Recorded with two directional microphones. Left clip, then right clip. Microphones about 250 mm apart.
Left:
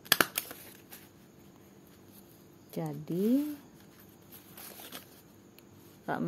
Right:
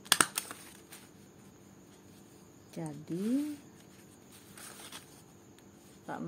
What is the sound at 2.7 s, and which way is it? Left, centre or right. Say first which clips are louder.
Speech: left 4 dB; left.